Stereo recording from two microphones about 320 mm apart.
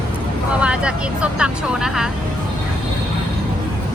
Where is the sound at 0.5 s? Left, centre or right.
Centre.